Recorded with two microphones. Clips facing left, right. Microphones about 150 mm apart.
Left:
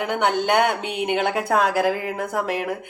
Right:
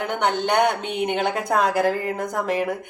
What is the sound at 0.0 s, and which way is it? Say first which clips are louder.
Speech: left 1 dB; 5° left (ahead or behind).